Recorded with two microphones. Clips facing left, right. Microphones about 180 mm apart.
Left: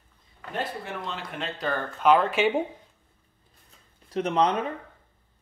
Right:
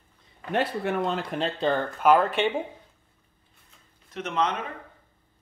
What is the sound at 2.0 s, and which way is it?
Speech, 5° right (ahead or behind).